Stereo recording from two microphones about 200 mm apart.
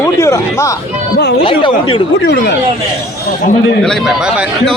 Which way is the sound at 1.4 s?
25° left (ahead or behind).